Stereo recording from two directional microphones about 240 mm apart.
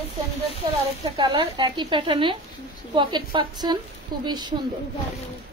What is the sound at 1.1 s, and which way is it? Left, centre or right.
A woman's voice, centre.